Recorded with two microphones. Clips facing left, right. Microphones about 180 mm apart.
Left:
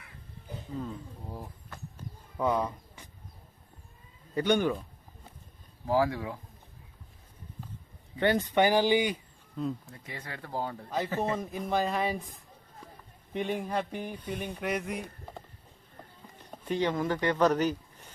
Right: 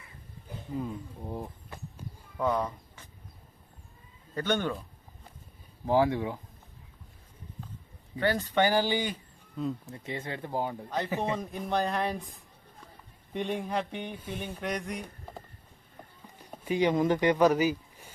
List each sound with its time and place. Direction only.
0.7 s speech: 10° right (ahead or behind)
1.3 s a sound: 15° right (ahead or behind)
2.4 s a sound: 10° left (ahead or behind)
4.4 s speech: 15° left (ahead or behind)
5.8 s speech: 25° right (ahead or behind)
8.2 s speech: 20° left (ahead or behind)
9.8 s speech: 25° right (ahead or behind)
10.8 s speech: 5° left (ahead or behind)
16.5 s speech: 10° right (ahead or behind)